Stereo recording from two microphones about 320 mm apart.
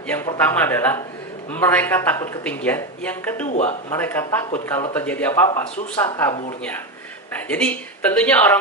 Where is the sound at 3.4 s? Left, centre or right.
Left.